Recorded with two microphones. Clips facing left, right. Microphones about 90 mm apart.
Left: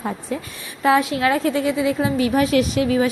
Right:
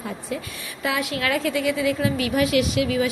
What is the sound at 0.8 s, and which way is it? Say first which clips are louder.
A woman's voice: left 8 dB; 35° left (ahead or behind).